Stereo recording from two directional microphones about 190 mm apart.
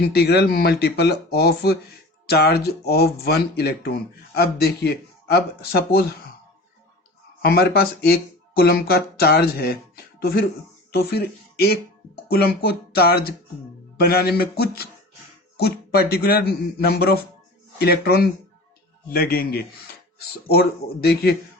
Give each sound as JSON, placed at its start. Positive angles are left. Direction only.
{"t": 0.0, "sound": "speech", "side_deg": 55}
{"t": 7.4, "sound": "speech", "side_deg": 55}
{"t": 15.5, "sound": "a man's voice", "side_deg": 55}